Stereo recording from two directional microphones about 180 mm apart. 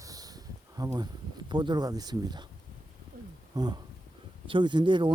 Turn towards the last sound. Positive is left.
turn(degrees=-25)  # may be behind; listen again after turning